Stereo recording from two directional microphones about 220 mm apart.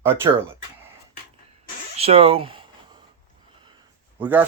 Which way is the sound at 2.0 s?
25° right (ahead or behind).